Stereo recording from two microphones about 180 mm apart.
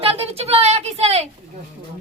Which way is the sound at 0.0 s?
30° right (ahead or behind).